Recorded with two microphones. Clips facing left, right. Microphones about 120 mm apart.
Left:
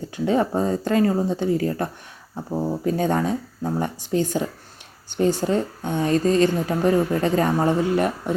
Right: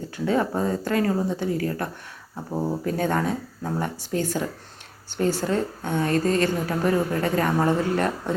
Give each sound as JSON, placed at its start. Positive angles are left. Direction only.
{"t": 0.3, "sound": "a woman's voice", "side_deg": 25}
{"t": 2.5, "sound": "speech", "side_deg": 0}
{"t": 2.8, "sound": "a woman's voice", "side_deg": 20}